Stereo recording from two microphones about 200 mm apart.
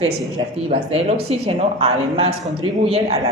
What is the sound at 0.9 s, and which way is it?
A woman's voice, 30° right (ahead or behind).